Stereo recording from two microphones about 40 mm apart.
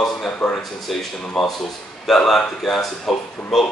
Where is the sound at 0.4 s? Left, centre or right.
Centre.